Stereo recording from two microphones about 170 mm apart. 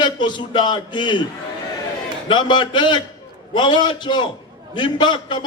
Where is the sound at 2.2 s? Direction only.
25° left (ahead or behind).